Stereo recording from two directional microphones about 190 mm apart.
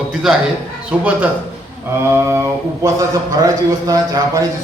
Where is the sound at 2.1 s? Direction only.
15° right (ahead or behind).